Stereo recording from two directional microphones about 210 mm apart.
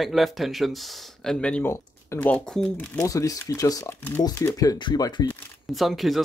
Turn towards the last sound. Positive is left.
turn(degrees=0)  # may be behind; listen again after turning